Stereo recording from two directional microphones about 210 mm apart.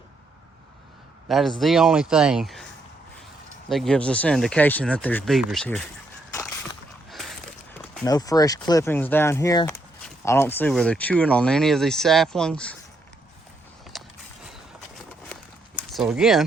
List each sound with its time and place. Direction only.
1.3 s speech: centre (ahead or behind)
3.7 s speech: centre (ahead or behind)
8.0 s speech: 15° left (ahead or behind)
13.9 s a sound: centre (ahead or behind)
15.9 s speech: centre (ahead or behind)